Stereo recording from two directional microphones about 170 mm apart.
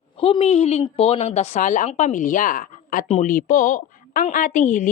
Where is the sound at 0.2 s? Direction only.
35° left (ahead or behind).